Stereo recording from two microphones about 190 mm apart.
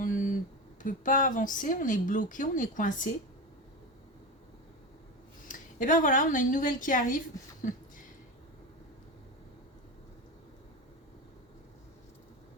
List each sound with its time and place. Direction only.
0.0 s a sound: 45° left (ahead or behind)
0.8 s a woman's voice: 45° left (ahead or behind)
5.5 s a woman's voice: 45° left (ahead or behind)